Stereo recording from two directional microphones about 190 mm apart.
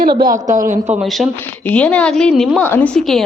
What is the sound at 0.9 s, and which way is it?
A woman's voice, centre (ahead or behind).